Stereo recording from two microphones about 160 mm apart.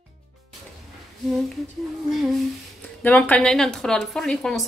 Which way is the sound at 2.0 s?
Centre (ahead or behind).